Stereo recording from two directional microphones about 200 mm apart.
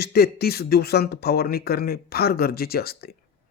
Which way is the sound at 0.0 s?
50° left (ahead or behind).